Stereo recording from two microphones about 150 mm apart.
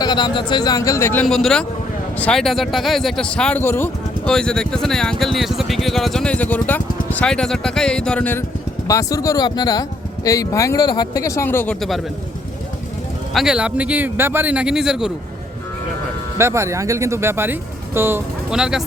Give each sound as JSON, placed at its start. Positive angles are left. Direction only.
{"t": 0.0, "sound": "speech", "side_deg": 30}
{"t": 1.2, "sound": "speech", "side_deg": 5}
{"t": 8.9, "sound": "speech", "side_deg": 25}
{"t": 13.3, "sound": "speech", "side_deg": -5}
{"t": 16.4, "sound": "speech", "side_deg": -20}
{"t": 18.5, "sound": "speech", "side_deg": -5}